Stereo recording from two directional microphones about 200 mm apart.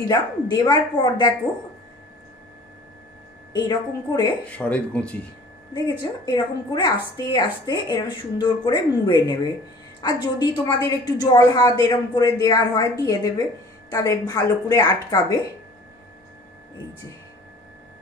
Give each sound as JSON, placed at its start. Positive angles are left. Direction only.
{"t": 0.1, "sound": "a woman's voice", "side_deg": 20}
{"t": 3.5, "sound": "a woman's voice", "side_deg": 20}
{"t": 4.5, "sound": "speech", "side_deg": 5}
{"t": 5.7, "sound": "a woman's voice", "side_deg": 20}